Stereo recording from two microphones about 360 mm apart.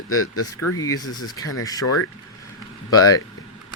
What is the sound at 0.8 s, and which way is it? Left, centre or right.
A man's voice, centre.